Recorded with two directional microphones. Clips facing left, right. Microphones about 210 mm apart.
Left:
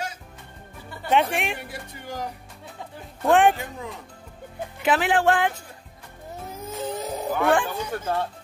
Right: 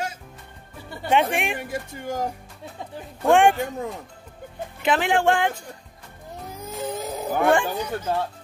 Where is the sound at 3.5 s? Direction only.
45° right (ahead or behind).